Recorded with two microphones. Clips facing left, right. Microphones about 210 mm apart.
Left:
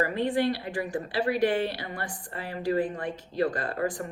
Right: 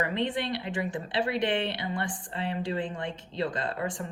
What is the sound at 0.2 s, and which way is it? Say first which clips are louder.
A woman's voice: left 4 dB; 20° right (ahead or behind).